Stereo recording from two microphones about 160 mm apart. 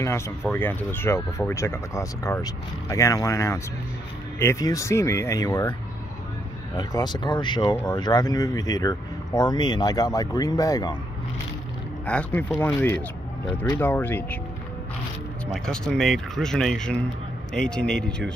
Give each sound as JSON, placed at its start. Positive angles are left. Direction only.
{"t": 0.5, "sound": "speech", "side_deg": 10}
{"t": 6.8, "sound": "speech", "side_deg": 25}
{"t": 12.1, "sound": "speech", "side_deg": 10}
{"t": 15.4, "sound": "speech", "side_deg": 5}